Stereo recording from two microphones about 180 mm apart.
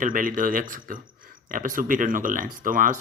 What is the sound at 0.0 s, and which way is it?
Speech, 50° right (ahead or behind).